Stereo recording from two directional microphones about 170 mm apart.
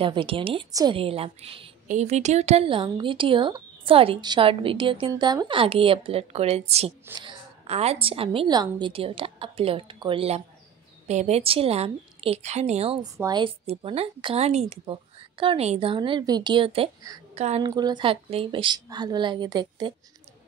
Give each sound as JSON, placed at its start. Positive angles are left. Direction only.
{"t": 0.0, "sound": "speech", "side_deg": -30}
{"t": 0.7, "sound": "a woman's voice", "side_deg": -20}
{"t": 0.9, "sound": "speech", "side_deg": -35}
{"t": 13.0, "sound": "a woman's voice", "side_deg": -25}
{"t": 13.7, "sound": "a woman's voice", "side_deg": -35}
{"t": 17.6, "sound": "a woman's voice", "side_deg": -25}